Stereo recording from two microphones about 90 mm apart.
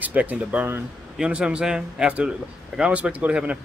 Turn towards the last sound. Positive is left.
turn(degrees=-15)  # may be behind; listen again after turning